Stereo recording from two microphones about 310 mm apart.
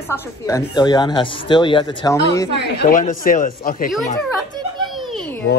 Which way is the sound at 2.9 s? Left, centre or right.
Left.